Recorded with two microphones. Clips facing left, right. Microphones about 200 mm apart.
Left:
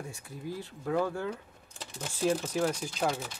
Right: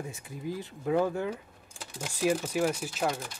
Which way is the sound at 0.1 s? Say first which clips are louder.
Right 3 dB; 20° right (ahead or behind).